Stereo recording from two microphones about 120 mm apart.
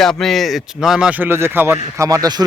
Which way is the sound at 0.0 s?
5° left (ahead or behind).